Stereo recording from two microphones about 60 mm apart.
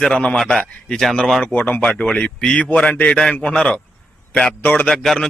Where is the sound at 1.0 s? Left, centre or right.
Centre.